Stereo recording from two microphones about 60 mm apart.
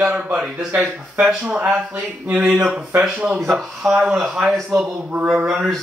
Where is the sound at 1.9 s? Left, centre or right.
Right.